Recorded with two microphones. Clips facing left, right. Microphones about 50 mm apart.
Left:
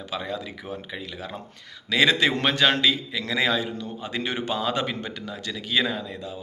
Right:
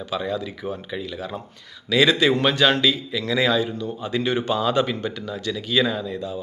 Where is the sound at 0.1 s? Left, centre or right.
Left.